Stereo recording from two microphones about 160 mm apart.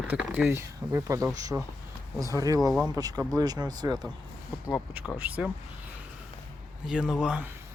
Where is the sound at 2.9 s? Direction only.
20° right (ahead or behind).